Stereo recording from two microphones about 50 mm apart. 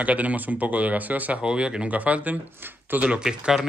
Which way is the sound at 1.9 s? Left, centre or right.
Right.